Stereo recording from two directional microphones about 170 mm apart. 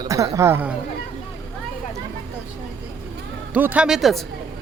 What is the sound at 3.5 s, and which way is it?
Speech, 10° right (ahead or behind).